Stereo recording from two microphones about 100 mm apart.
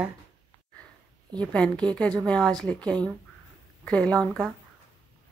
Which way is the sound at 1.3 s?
10° left (ahead or behind).